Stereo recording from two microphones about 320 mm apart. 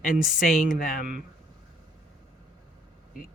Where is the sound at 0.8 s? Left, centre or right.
Left.